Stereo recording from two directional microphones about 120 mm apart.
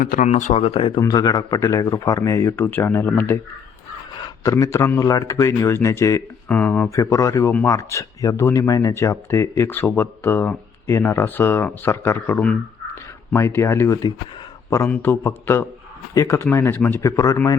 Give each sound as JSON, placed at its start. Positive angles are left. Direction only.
{"t": 0.2, "sound": "speech", "side_deg": 90}
{"t": 0.6, "sound": "speech", "side_deg": 50}
{"t": 2.6, "sound": "speech", "side_deg": 15}
{"t": 4.4, "sound": "speech", "side_deg": 25}
{"t": 6.5, "sound": "speech", "side_deg": 15}
{"t": 6.9, "sound": "speech", "side_deg": 25}